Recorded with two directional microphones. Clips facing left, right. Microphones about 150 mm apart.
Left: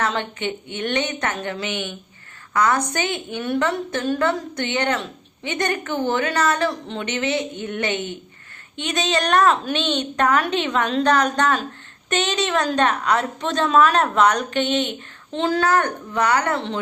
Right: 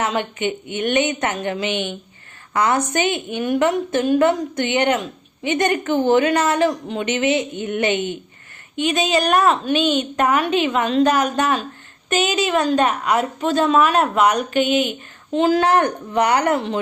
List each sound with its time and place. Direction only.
0.0 s a woman's voice: 15° right (ahead or behind)